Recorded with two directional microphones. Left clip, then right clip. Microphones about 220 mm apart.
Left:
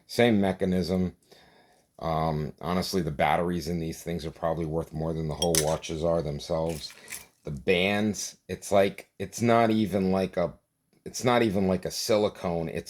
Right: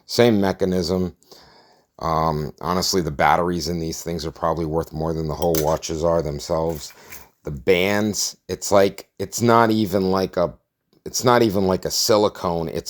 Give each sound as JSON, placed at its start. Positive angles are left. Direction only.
{"t": 0.1, "sound": "speech", "side_deg": -30}